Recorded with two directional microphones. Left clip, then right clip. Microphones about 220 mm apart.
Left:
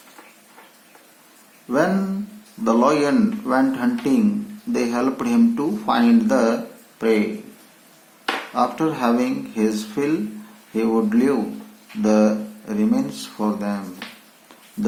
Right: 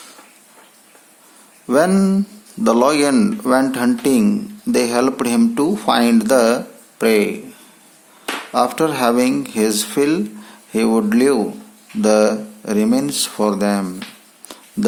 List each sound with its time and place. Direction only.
1.6 s speech: 55° right (ahead or behind)
8.5 s speech: 50° right (ahead or behind)